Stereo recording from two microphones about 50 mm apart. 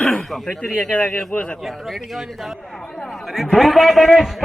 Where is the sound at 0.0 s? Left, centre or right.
Centre.